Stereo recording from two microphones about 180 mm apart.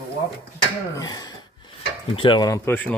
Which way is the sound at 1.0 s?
20° left (ahead or behind).